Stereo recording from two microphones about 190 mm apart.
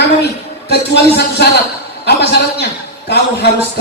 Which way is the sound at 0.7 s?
60° left (ahead or behind).